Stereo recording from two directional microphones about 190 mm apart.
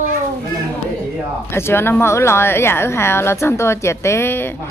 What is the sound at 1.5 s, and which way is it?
A woman's voice, 10° left (ahead or behind).